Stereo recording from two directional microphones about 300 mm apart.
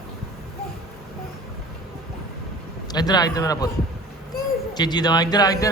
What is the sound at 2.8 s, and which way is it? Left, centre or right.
Speech, centre.